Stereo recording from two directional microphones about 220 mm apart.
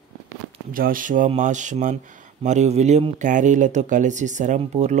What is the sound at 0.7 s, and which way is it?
Speech, 40° right (ahead or behind).